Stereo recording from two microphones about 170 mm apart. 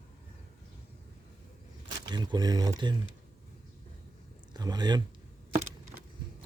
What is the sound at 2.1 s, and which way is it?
Speech, 25° right (ahead or behind).